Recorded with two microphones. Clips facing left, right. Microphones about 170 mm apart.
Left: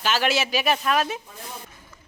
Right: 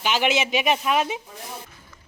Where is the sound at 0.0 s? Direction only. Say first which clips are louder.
Right 1 dB; 15° right (ahead or behind).